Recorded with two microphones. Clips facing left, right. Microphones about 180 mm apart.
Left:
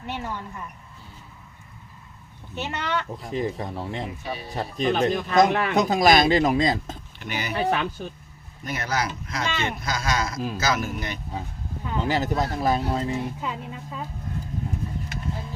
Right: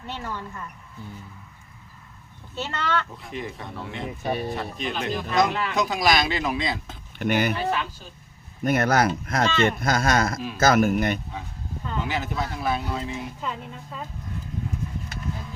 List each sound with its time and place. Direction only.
0.0 s a woman's voice: 15° left (ahead or behind)
2.6 s a woman's voice: 15° left (ahead or behind)
3.2 s speech: 40° left (ahead or behind)
4.2 s speech: 55° right (ahead or behind)
4.5 s speech: 40° left (ahead or behind)
7.2 s speech: 55° right (ahead or behind)
7.7 s speech: 60° left (ahead or behind)
8.6 s speech: 55° right (ahead or behind)
9.5 s a woman's voice: 10° left (ahead or behind)
9.8 s speech: 55° right (ahead or behind)
12.0 s speech: 40° left (ahead or behind)